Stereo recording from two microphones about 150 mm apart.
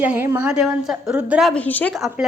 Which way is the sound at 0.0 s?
15° right (ahead or behind).